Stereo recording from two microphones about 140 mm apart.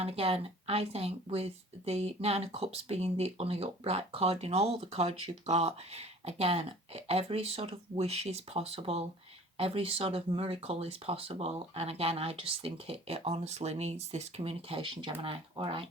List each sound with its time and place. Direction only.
0.0 s speech: 45° right (ahead or behind)